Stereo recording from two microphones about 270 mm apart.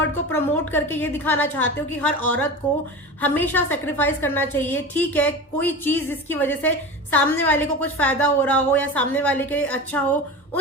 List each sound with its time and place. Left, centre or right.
0.3 s a woman's voice: centre